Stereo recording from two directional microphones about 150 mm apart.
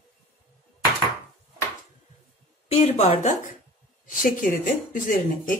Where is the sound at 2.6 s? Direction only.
45° left (ahead or behind).